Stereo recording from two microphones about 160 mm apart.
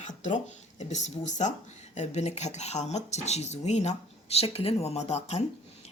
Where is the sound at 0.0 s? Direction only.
50° left (ahead or behind).